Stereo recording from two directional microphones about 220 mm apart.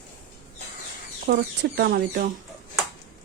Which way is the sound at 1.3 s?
45° right (ahead or behind).